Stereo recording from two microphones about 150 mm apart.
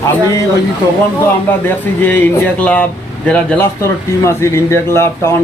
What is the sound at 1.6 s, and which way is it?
A man's voice, 10° left (ahead or behind).